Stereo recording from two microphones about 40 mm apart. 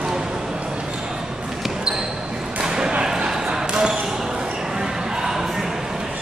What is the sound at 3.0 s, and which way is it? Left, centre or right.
Basketball bounce, centre.